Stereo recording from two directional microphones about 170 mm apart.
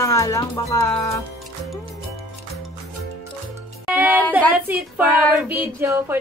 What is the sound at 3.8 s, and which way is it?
Music, 10° right (ahead or behind).